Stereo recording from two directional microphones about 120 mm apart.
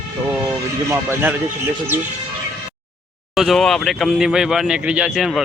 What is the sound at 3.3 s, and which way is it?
Speech, centre (ahead or behind).